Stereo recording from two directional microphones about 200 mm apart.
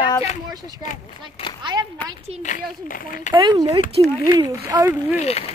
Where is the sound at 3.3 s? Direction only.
20° right (ahead or behind).